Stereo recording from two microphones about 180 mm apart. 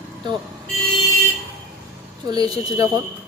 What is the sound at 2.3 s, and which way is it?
Speech, 20° right (ahead or behind).